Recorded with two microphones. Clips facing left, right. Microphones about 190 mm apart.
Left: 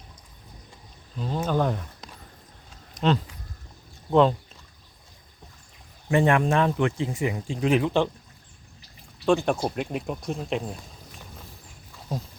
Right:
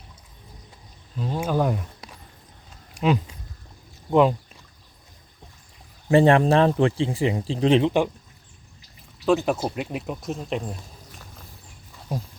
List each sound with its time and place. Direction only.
1.2 s speech: 5° right (ahead or behind)
2.9 s a sound: 10° right (ahead or behind)
4.1 s speech: 10° right (ahead or behind)
6.1 s speech: 30° right (ahead or behind)
9.2 s speech: 5° right (ahead or behind)